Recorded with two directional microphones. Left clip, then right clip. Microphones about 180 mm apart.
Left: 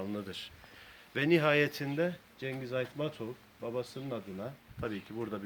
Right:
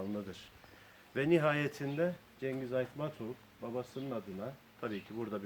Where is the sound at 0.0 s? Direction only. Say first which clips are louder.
Left 2 dB; 25° left (ahead or behind).